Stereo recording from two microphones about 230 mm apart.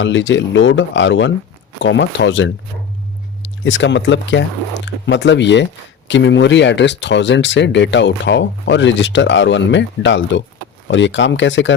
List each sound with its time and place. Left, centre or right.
0.0 s speech: left
3.6 s speech: left